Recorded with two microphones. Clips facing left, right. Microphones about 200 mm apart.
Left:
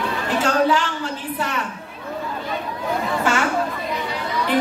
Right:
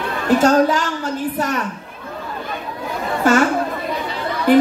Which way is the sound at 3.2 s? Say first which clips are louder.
Right 8 dB; 40° right (ahead or behind).